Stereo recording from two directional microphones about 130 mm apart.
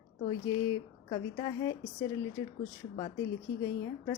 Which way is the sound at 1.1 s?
30° left (ahead or behind).